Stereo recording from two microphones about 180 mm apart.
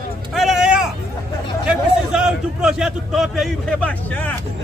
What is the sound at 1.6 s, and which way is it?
A man's voice, 5° right (ahead or behind).